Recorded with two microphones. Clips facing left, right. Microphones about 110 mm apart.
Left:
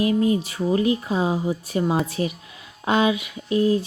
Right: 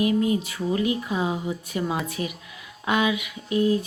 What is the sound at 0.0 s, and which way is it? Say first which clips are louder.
Speech: left 2 dB; 30° left (ahead or behind).